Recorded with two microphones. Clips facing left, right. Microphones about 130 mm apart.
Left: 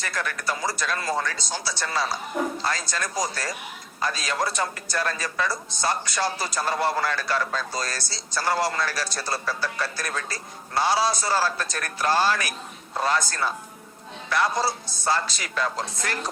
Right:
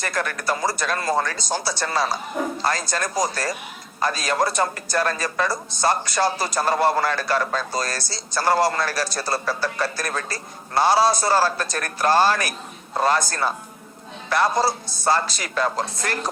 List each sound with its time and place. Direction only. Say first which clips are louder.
0.0 s speech: right 4 dB; 45° right (ahead or behind)